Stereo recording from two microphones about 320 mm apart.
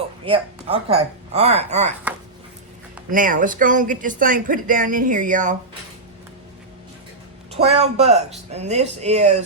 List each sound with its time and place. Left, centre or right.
0.3 s speech: centre
3.1 s speech: right
7.5 s speech: centre